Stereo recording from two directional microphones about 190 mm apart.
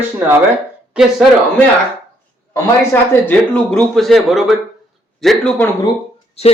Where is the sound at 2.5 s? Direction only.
10° left (ahead or behind).